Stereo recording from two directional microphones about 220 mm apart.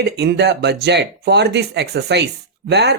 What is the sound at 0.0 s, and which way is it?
Speech, 50° right (ahead or behind).